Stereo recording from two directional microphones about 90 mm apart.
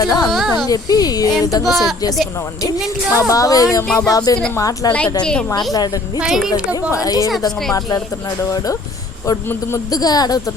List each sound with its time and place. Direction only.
0.0 s speech: 45° left (ahead or behind)
0.3 s speech: centre (ahead or behind)
0.7 s speech: 45° left (ahead or behind)
1.6 s a woman's voice: centre (ahead or behind)
3.2 s speech: 40° left (ahead or behind)
4.9 s a woman's voice: 15° left (ahead or behind)
6.1 s speech: 5° right (ahead or behind)
6.9 s speech: 40° left (ahead or behind)
9.9 s speech: 45° left (ahead or behind)